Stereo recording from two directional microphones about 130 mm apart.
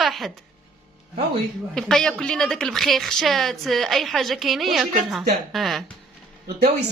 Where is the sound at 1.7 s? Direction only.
5° left (ahead or behind).